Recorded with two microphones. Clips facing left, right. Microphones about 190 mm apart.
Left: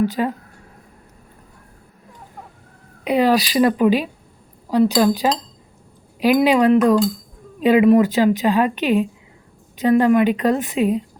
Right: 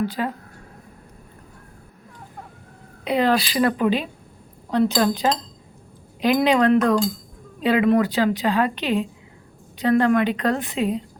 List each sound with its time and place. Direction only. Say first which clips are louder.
0.2 s speech: left 4 dB; 20° left (ahead or behind)
3.0 s a woman's voice: left 3 dB; 15° left (ahead or behind)